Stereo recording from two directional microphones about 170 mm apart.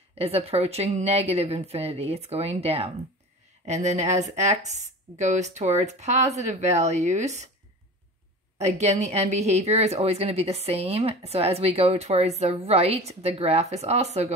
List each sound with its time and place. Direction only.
0.2 s a woman's voice: 35° right (ahead or behind)
8.5 s a woman's voice: 40° right (ahead or behind)